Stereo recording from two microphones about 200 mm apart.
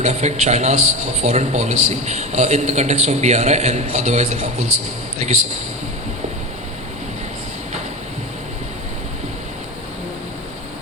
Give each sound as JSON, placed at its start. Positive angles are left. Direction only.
{"t": 0.0, "sound": "a man's voice", "side_deg": -35}